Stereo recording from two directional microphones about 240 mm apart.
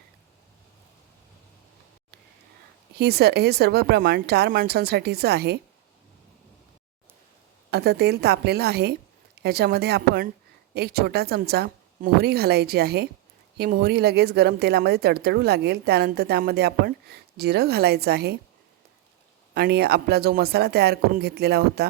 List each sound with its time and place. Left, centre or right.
3.0 s a woman's voice: right
7.7 s a woman's voice: right
19.5 s speech: right